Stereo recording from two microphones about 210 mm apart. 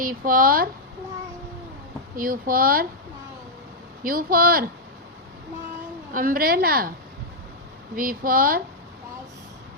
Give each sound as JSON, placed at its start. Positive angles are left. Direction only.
{"t": 0.0, "sound": "speech", "side_deg": -40}
{"t": 2.1, "sound": "a woman's voice", "side_deg": -40}
{"t": 4.0, "sound": "a woman's voice", "side_deg": -45}
{"t": 6.1, "sound": "a woman's voice", "side_deg": -45}
{"t": 7.9, "sound": "speech", "side_deg": -40}